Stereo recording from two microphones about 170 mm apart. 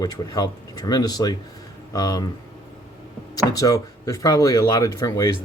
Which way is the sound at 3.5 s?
20° left (ahead or behind).